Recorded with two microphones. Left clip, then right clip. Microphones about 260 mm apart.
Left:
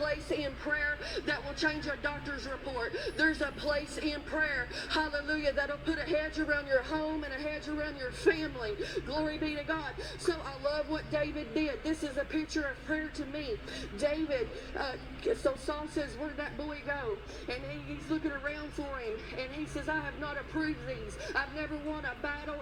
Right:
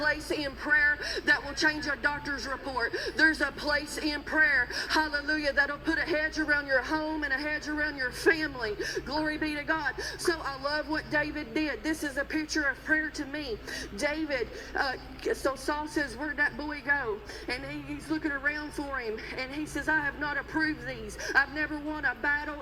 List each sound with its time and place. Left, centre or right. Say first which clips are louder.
0.3 s speech: right 2 dB; right
1.3 s a man's voice: right 7 dB; right
18.3 s a man's voice: right 6 dB; right
19.7 s a man's voice: right 8 dB; right